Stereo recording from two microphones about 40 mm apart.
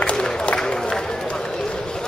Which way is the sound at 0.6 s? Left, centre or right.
Centre.